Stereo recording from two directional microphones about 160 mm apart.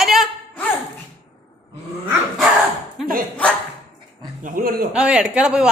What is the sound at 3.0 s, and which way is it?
Speech, centre (ahead or behind).